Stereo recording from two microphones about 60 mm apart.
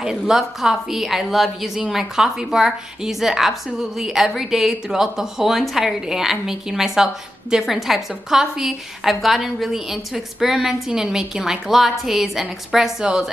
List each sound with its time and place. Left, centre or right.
0.0 s a woman's voice: centre